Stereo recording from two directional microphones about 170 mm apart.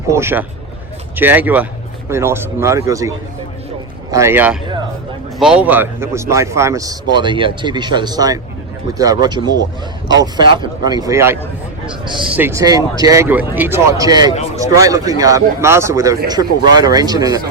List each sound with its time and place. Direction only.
0.1 s a man's voice: 15° right (ahead or behind)
12.4 s speech: 15° right (ahead or behind)